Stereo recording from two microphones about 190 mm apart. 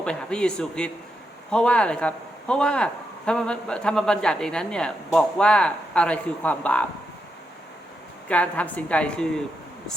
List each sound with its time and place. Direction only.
0.0 s a man's voice: 5° left (ahead or behind)
8.3 s a woman's voice: 5° left (ahead or behind)